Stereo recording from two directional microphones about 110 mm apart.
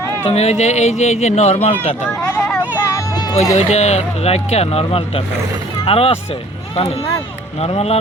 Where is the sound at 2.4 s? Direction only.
15° left (ahead or behind).